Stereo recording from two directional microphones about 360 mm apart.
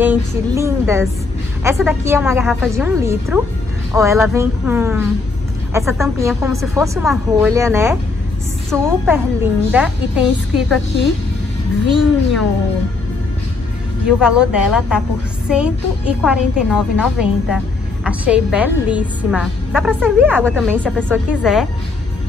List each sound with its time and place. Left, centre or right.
0.0 s a woman's voice: centre
11.9 s a woman's voice: centre
14.0 s a woman's voice: centre